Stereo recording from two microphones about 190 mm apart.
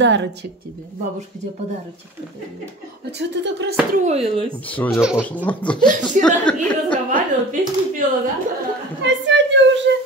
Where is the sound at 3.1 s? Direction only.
65° right (ahead or behind).